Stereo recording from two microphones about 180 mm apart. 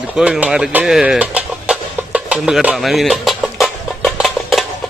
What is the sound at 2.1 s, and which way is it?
Music, 5° right (ahead or behind).